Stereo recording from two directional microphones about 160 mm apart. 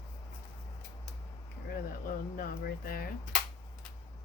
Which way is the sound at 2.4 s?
65° left (ahead or behind).